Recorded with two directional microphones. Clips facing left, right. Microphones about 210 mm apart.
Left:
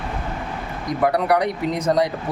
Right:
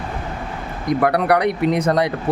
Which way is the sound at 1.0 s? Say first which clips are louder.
Right 1 dB; 65° right (ahead or behind).